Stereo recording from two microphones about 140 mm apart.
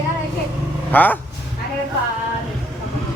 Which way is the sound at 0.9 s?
10° left (ahead or behind).